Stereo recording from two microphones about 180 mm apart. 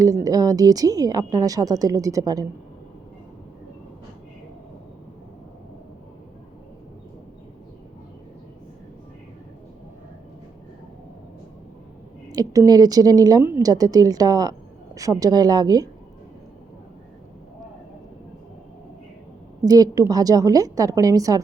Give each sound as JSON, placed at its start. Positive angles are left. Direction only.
{"t": 0.0, "sound": "a woman's voice", "side_deg": -20}
{"t": 12.3, "sound": "a woman's voice", "side_deg": -20}
{"t": 19.6, "sound": "a woman's voice", "side_deg": -20}